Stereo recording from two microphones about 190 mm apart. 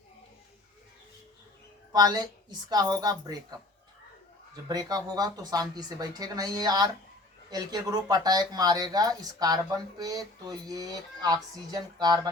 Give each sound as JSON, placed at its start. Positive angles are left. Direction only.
{"t": 1.9, "sound": "speech", "side_deg": -20}
{"t": 4.7, "sound": "speech", "side_deg": -20}